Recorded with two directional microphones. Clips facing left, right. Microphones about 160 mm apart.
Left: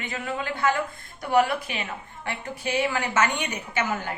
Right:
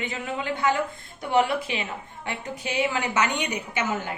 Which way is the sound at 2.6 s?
15° right (ahead or behind).